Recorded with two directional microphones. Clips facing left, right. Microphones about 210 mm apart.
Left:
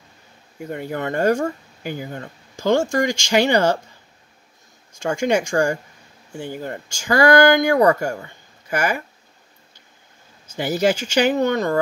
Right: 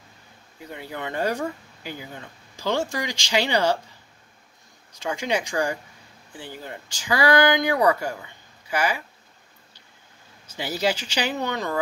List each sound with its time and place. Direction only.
0.6 s speech: 50° left (ahead or behind)
4.9 s speech: 50° left (ahead or behind)
10.4 s speech: 50° left (ahead or behind)